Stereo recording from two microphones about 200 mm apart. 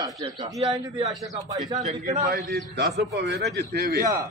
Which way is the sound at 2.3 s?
55° right (ahead or behind).